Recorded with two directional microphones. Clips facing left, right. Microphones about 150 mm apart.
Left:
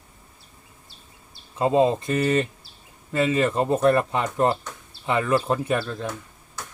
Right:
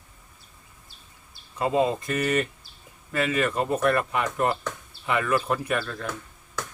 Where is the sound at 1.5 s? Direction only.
25° left (ahead or behind).